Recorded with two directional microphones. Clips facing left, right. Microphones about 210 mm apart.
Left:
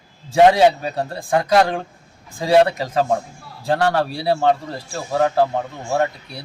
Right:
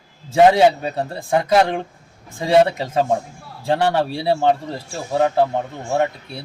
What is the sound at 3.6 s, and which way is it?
Speech, 25° right (ahead or behind).